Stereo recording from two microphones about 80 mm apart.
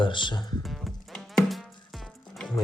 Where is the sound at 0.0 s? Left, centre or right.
Left.